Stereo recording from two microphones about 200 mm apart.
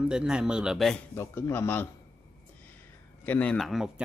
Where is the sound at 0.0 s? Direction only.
5° right (ahead or behind).